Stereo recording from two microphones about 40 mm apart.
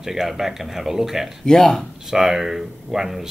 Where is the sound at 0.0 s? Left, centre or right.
Centre.